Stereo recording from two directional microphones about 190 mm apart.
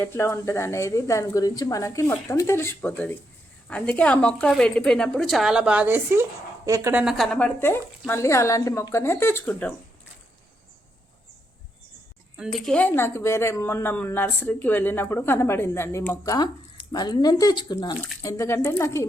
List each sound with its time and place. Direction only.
0.0 s a woman's voice: 15° left (ahead or behind)
12.4 s speech: centre (ahead or behind)